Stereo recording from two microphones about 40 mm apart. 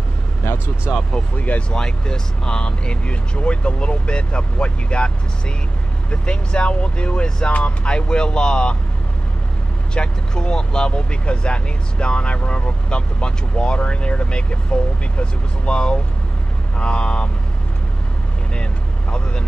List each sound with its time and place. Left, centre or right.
0.4 s vehicle: left
1.1 s speech: left
1.7 s speech: centre
7.4 s speech: left
9.9 s speech: left
18.5 s speech: left